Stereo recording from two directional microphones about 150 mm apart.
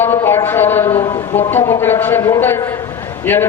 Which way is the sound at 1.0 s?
30° left (ahead or behind).